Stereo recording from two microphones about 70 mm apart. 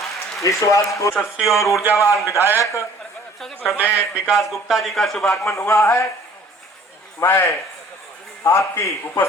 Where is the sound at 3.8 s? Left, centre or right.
Left.